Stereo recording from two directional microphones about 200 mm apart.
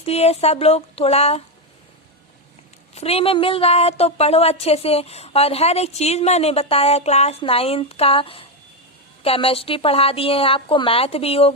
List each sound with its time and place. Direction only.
0.0 s a woman's voice: 30° left (ahead or behind)
2.9 s a woman's voice: 30° left (ahead or behind)